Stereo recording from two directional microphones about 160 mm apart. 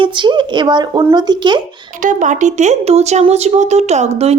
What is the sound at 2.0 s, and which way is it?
Speech, 55° right (ahead or behind).